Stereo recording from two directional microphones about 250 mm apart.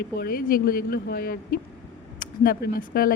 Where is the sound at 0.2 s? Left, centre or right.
Left.